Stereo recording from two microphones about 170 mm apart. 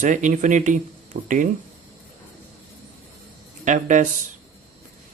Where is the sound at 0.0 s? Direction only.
50° right (ahead or behind).